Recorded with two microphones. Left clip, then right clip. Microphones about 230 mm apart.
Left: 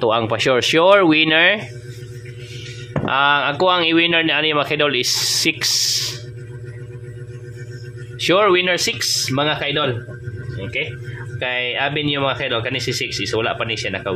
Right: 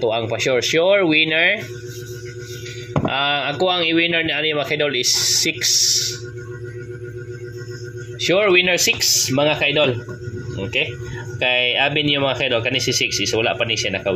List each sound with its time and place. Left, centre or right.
0.0 s a man's voice: centre
3.1 s a man's voice: centre
8.2 s speech: left
11.3 s speech: centre